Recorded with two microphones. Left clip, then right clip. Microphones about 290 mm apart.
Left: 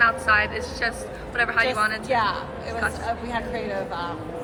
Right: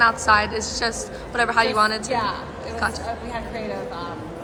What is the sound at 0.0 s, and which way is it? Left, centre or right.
A woman's voice, centre.